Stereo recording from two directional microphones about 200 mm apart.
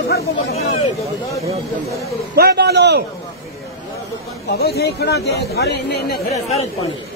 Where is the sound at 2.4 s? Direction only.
55° right (ahead or behind).